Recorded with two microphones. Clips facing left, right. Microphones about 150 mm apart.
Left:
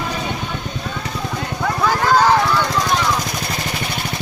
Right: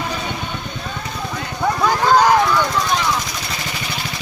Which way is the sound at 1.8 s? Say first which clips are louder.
Even; 15° right (ahead or behind).